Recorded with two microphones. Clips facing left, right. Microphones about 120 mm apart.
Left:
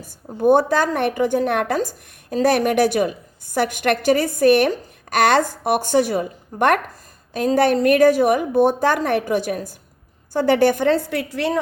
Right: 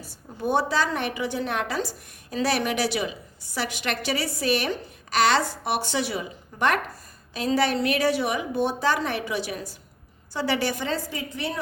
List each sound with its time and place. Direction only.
0.0 s a woman's voice: 50° left (ahead or behind); by 11.6 s 90° left